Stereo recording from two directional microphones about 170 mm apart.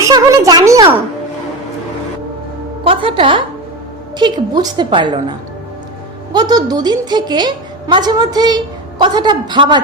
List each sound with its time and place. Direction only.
0.0 s a woman's voice: 20° right (ahead or behind)
2.8 s a woman's voice: 30° right (ahead or behind)
6.3 s a woman's voice: 25° right (ahead or behind)